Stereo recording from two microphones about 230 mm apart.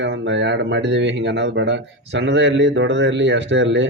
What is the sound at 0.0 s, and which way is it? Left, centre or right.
Speech, right.